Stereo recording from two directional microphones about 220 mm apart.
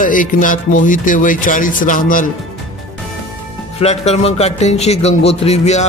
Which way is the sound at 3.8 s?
30° left (ahead or behind).